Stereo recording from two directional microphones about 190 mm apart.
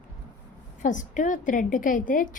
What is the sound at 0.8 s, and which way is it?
A woman's voice, 40° left (ahead or behind).